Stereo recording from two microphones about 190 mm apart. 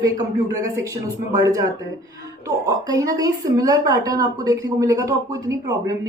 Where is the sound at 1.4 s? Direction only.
20° right (ahead or behind).